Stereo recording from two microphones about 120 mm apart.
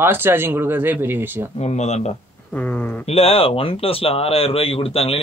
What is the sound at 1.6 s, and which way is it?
Speech, 65° left (ahead or behind).